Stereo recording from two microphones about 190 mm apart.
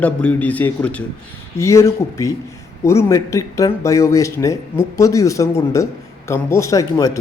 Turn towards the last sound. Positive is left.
turn(degrees=15)  # may be behind; listen again after turning